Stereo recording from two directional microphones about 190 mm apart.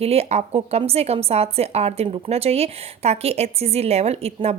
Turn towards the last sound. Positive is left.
turn(degrees=-35)  # may be behind; listen again after turning